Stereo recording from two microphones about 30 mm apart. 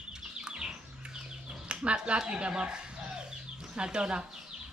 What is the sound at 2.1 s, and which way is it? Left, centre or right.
Speech, right.